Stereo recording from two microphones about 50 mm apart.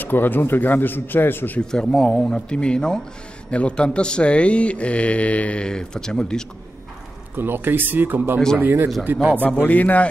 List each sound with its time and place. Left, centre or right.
0.0 s speech: left
1.6 s a man's voice: centre
5.7 s a man's voice: centre
7.3 s a man's voice: right
9.7 s a man's voice: left